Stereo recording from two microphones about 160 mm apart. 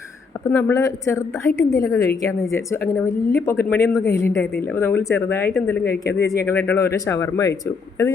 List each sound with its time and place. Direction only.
0.5 s a woman's voice: 15° left (ahead or behind)
5.9 s speech: 90° left
6.2 s a woman's voice: 15° left (ahead or behind)